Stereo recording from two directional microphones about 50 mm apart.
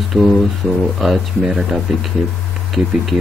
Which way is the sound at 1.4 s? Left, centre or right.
Centre.